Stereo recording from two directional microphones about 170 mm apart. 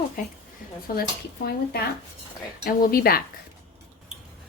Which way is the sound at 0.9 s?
60° left (ahead or behind).